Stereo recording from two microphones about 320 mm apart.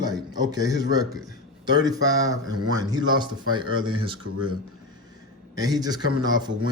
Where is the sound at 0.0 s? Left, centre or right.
Centre.